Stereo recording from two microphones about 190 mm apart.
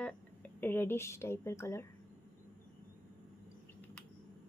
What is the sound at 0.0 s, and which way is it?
Speech, 10° left (ahead or behind).